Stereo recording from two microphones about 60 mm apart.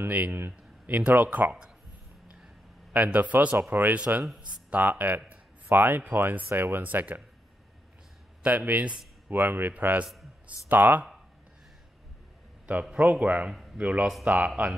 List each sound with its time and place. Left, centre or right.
0.1 s a man's voice: right
2.9 s a man's voice: right
8.4 s a man's voice: right
9.3 s speech: right
12.9 s a man's voice: right
13.5 s a sound: centre
13.7 s a man's voice: right